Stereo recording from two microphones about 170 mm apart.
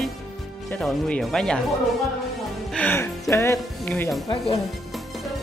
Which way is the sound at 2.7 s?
10° left (ahead or behind).